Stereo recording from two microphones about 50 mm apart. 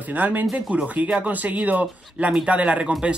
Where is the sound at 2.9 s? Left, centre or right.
Centre.